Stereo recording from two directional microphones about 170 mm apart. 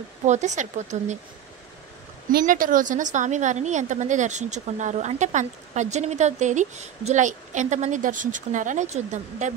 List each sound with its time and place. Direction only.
0.2 s a woman's voice: 45° right (ahead or behind)
2.3 s a woman's voice: 55° right (ahead or behind)